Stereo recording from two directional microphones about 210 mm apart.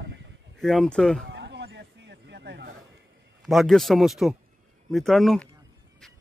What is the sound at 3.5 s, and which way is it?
A man's voice, centre (ahead or behind).